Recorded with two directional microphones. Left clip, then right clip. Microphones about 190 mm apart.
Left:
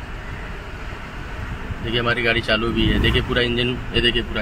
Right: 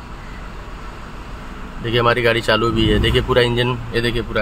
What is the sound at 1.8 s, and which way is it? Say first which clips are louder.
Speech: right 4 dB; 50° right (ahead or behind).